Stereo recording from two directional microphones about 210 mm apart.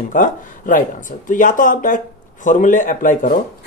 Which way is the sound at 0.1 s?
40° left (ahead or behind).